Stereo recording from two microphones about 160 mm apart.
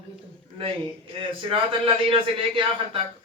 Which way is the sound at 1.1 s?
35° right (ahead or behind).